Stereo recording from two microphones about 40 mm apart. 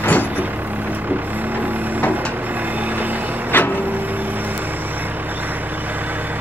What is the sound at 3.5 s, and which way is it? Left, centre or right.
Vehicle, left.